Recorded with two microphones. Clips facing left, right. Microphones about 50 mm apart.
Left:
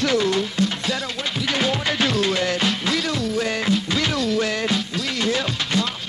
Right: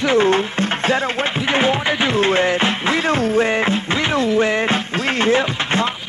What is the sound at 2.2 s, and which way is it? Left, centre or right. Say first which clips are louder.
Music: right 5 dB; right.